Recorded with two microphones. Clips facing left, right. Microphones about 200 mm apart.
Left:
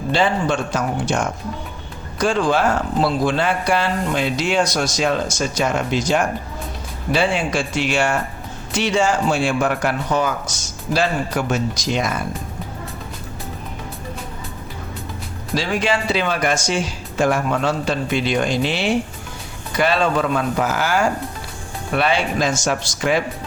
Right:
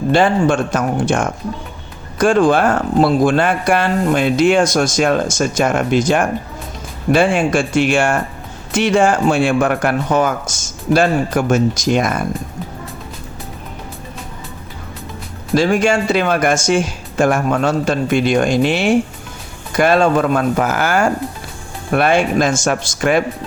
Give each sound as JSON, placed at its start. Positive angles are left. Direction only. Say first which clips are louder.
{"t": 0.1, "sound": "speech", "louder": "right 5 dB", "side_deg": -50}
{"t": 15.5, "sound": "speech", "louder": "right 7 dB", "side_deg": -50}